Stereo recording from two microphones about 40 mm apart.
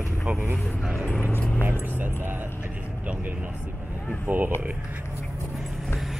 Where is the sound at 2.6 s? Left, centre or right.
Right.